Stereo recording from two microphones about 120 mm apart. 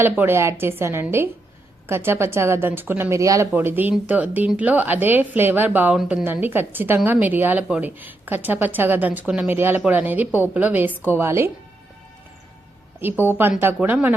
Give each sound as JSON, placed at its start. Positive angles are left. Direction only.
{"t": 0.0, "sound": "a woman's voice", "side_deg": -20}
{"t": 13.0, "sound": "a woman's voice", "side_deg": -15}